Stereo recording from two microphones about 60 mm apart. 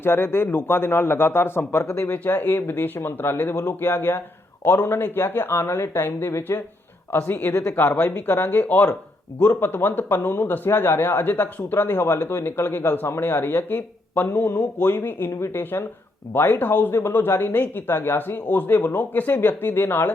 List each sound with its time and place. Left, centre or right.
0.0 s a man's voice: left
2.1 s a man's voice: left
7.9 s speech: left
8.4 s a man's voice: left